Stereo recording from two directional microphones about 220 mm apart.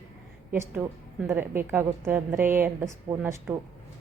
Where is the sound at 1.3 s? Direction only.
10° right (ahead or behind).